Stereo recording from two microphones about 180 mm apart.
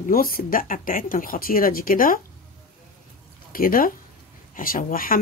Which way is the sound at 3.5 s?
50° left (ahead or behind).